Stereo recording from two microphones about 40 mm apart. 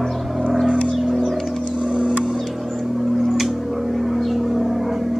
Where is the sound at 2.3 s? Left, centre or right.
Centre.